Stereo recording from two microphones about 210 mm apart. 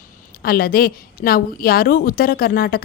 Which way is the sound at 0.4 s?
45° left (ahead or behind).